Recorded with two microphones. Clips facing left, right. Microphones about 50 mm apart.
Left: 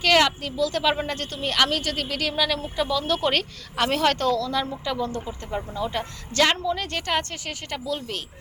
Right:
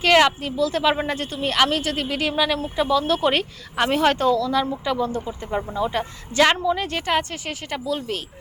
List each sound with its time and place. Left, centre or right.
0.0 s a woman's voice: centre